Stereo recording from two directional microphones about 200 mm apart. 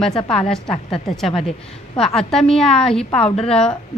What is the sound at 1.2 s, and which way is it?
A woman's voice, centre (ahead or behind).